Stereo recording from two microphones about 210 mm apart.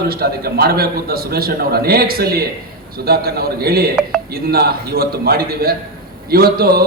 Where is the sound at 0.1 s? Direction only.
45° right (ahead or behind).